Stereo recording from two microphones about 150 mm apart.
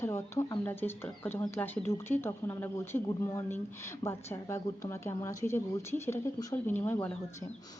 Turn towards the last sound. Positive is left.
turn(degrees=15)  # may be behind; listen again after turning